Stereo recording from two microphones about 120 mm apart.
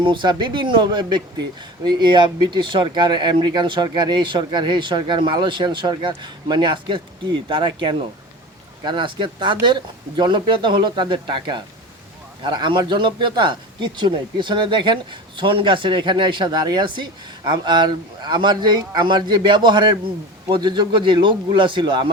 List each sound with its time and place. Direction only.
0.0 s a man's voice: 40° right (ahead or behind)